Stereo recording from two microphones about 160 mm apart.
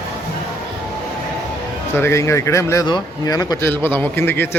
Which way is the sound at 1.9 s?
15° left (ahead or behind).